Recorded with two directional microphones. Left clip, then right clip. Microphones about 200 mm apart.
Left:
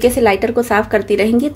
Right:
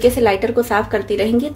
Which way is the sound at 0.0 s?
30° left (ahead or behind).